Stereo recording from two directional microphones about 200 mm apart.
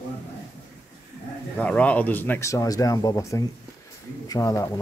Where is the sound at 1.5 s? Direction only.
5° left (ahead or behind).